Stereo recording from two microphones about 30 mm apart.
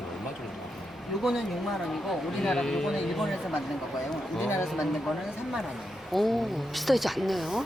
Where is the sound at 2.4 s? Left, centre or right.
Centre.